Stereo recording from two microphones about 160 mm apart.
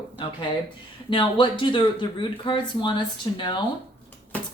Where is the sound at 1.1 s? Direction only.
30° left (ahead or behind).